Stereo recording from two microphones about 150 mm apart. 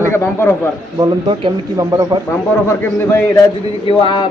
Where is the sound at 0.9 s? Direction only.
30° right (ahead or behind).